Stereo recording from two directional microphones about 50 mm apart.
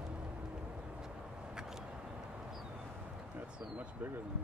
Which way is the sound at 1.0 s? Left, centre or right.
Centre.